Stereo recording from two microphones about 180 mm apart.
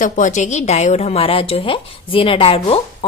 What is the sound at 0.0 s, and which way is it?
A woman's voice, 45° left (ahead or behind).